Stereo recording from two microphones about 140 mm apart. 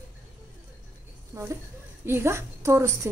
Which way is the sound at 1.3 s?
25° right (ahead or behind).